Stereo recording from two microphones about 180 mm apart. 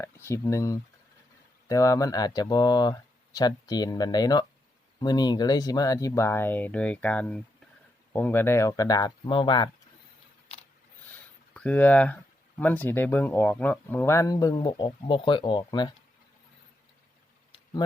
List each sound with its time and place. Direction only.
0.0 s speech: 15° left (ahead or behind)
11.5 s speech: 10° left (ahead or behind); by 16.0 s 25° left (ahead or behind)